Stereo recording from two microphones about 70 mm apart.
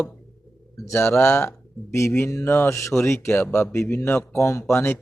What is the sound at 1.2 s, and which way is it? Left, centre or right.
Speech, left.